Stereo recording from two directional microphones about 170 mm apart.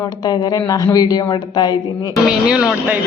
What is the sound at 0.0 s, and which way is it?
A man's voice, 25° left (ahead or behind).